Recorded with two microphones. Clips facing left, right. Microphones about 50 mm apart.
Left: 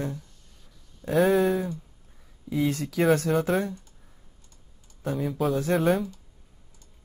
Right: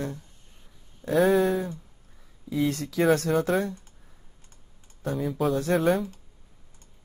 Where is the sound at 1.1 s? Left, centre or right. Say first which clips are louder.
Even; centre.